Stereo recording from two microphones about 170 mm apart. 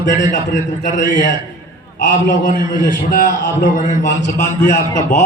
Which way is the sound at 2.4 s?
50° left (ahead or behind).